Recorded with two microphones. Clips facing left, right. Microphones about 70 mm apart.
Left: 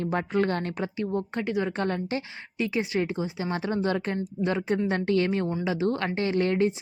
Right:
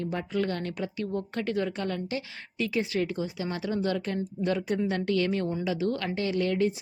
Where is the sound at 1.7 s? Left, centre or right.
Left.